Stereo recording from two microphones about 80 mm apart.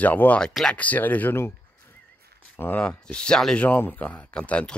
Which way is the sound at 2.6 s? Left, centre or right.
Left.